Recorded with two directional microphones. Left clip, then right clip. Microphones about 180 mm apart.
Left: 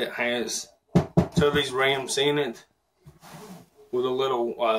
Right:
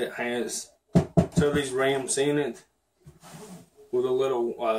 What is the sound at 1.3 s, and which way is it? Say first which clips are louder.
Speech: left 4 dB; 20° right (ahead or behind).